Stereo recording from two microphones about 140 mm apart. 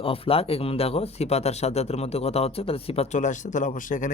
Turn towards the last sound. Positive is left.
turn(degrees=65)  # may be behind; listen again after turning